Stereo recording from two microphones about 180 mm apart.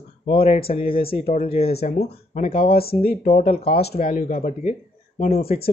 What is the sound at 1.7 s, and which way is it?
Speech, 60° left (ahead or behind).